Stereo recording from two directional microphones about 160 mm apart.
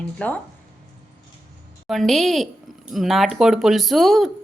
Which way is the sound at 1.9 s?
Centre (ahead or behind).